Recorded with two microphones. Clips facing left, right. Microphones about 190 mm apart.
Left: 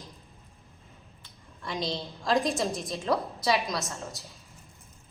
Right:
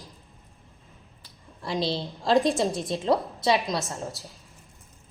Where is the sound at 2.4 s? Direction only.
30° right (ahead or behind).